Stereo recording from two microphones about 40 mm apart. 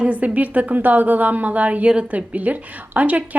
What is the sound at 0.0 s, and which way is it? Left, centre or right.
Speech, right.